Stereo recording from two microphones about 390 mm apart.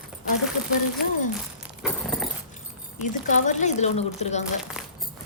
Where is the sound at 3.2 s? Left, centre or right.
Centre.